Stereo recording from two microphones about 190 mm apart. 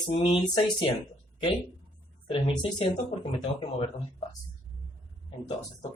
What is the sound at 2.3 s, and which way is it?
Speech, 30° left (ahead or behind).